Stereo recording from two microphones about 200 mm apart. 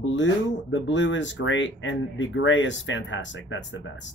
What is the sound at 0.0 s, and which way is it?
Speech, 65° left (ahead or behind).